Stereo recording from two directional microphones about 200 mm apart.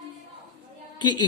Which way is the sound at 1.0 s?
20° left (ahead or behind).